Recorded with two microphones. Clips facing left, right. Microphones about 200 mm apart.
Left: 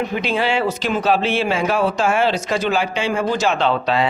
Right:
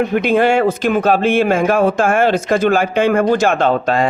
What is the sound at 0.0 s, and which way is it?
Speech, 55° right (ahead or behind).